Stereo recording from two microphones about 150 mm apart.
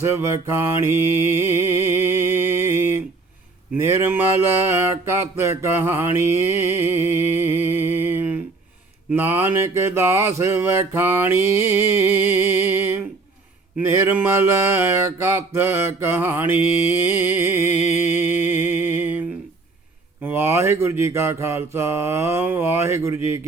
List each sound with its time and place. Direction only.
0.0 s mantra: 20° right (ahead or behind)
17.7 s music: 50° left (ahead or behind)
18.8 s music: 10° right (ahead or behind)
20.2 s mantra: 15° right (ahead or behind)